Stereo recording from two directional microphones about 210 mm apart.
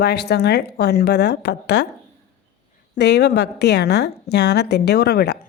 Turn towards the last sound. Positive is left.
turn(degrees=50)  # may be behind; listen again after turning